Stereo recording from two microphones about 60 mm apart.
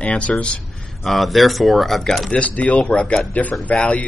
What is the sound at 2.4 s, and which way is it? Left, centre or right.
Speech, left.